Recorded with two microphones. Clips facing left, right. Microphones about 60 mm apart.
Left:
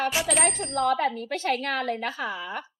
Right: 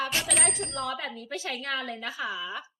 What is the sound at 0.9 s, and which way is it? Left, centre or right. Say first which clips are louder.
A woman's voice: left 8 dB; left.